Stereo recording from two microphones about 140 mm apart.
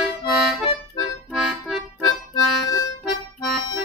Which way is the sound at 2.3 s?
25° left (ahead or behind).